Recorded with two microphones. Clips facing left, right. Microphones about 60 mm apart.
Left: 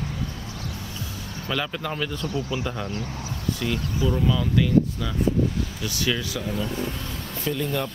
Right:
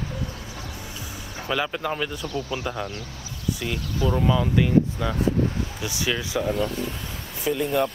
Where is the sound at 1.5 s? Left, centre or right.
Centre.